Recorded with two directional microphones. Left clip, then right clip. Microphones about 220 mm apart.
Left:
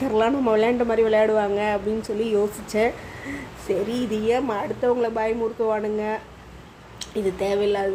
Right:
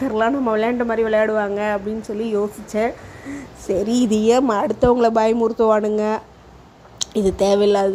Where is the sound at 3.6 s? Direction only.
35° right (ahead or behind).